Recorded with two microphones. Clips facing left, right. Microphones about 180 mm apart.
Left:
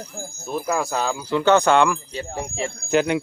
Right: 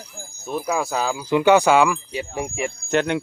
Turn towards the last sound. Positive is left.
turn(degrees=0)  # may be behind; listen again after turning